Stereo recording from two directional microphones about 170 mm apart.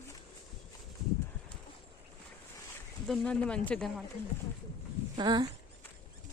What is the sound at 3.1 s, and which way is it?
Speech, 5° left (ahead or behind).